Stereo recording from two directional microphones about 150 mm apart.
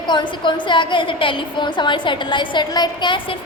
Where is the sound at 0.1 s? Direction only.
30° left (ahead or behind).